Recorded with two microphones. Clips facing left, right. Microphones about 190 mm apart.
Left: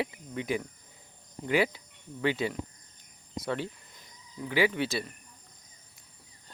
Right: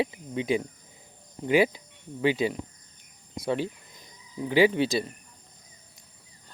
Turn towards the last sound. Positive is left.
turn(degrees=-15)  # may be behind; listen again after turning